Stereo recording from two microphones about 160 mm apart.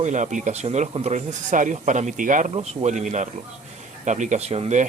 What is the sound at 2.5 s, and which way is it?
Speech, 40° right (ahead or behind).